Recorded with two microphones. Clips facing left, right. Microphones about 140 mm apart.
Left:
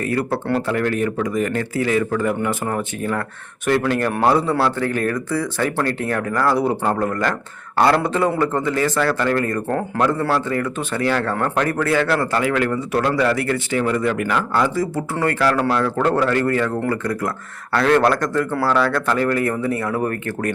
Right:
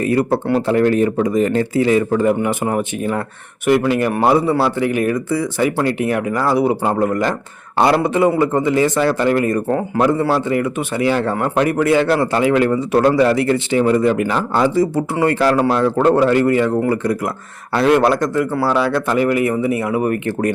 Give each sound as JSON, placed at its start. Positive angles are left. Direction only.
{"t": 0.0, "sound": "speech", "side_deg": -20}
{"t": 3.7, "sound": "speech", "side_deg": -5}